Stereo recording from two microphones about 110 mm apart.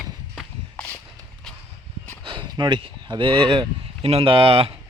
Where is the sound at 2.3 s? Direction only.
45° right (ahead or behind).